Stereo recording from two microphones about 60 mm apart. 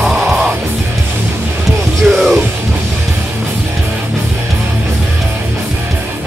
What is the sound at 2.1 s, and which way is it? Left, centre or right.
Music, centre.